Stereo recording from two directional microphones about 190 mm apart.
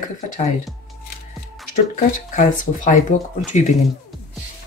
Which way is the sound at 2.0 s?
40° left (ahead or behind).